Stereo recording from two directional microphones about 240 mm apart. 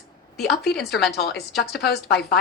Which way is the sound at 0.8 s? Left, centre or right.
Left.